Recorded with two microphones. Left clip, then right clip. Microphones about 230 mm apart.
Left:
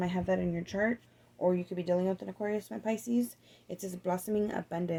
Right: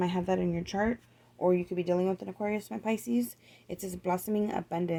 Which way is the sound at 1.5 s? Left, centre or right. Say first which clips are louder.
Right 2 dB; right.